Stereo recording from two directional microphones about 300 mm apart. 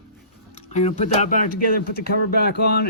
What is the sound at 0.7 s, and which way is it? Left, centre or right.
Speech, left.